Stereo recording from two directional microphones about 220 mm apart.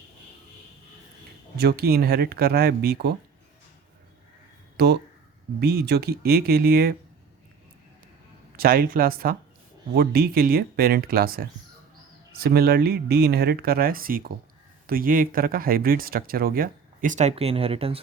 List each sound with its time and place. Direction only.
1.5 s speech: 45° right (ahead or behind)
4.8 s speech: 50° right (ahead or behind)
8.5 s speech: 40° right (ahead or behind); by 18.0 s 25° right (ahead or behind)